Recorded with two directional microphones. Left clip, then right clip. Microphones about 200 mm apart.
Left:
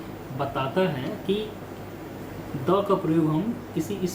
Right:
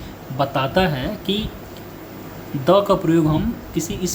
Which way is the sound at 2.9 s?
60° right (ahead or behind).